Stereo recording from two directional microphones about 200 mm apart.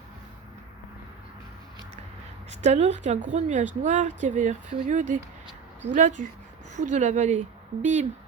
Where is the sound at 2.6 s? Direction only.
35° right (ahead or behind).